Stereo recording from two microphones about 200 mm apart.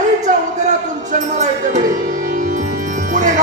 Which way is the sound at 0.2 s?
40° right (ahead or behind).